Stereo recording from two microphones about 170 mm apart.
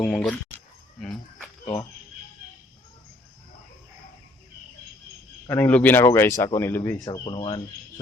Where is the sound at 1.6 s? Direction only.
20° left (ahead or behind).